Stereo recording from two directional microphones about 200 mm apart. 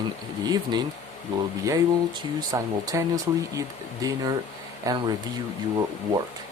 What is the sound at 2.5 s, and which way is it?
Speech, 20° right (ahead or behind).